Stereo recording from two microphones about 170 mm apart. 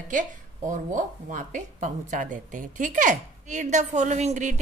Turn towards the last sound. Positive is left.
turn(degrees=-45)  # may be behind; listen again after turning